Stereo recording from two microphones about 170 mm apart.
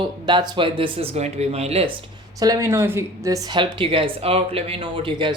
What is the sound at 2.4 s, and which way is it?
Speech, 20° right (ahead or behind).